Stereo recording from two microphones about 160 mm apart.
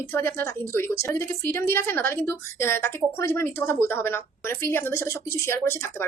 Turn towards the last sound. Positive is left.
turn(degrees=15)  # may be behind; listen again after turning